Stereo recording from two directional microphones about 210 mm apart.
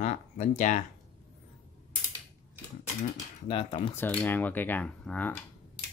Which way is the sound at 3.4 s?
25° left (ahead or behind).